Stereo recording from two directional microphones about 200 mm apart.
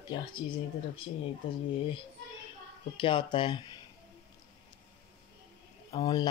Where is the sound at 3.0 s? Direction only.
25° left (ahead or behind).